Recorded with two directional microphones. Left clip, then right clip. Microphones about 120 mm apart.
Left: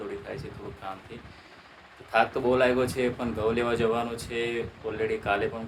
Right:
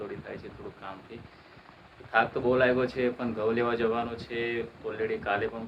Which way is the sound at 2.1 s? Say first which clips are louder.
Left 2 dB; 25° left (ahead or behind).